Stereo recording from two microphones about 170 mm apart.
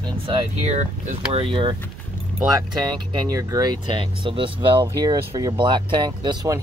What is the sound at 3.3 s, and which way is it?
Speech, 25° right (ahead or behind).